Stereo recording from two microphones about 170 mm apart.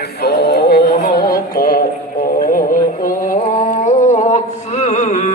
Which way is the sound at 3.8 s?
45° left (ahead or behind).